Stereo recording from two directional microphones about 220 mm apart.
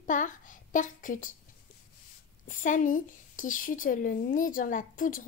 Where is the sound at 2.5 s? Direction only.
35° left (ahead or behind).